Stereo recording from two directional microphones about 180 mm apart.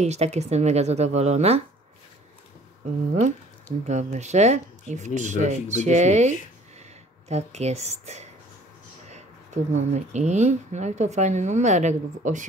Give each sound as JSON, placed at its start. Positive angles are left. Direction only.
{"t": 0.0, "sound": "speech", "side_deg": -35}
{"t": 3.8, "sound": "speech", "side_deg": -40}